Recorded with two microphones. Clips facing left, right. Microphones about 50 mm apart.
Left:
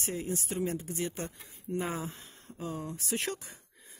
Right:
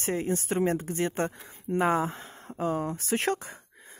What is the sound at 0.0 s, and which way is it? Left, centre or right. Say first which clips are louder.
Speech: right 6 dB; right.